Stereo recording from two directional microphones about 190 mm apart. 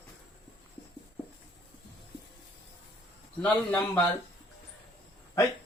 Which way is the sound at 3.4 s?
5° left (ahead or behind).